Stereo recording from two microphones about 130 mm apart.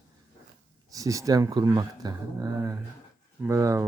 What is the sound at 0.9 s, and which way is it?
Speech, 25° right (ahead or behind).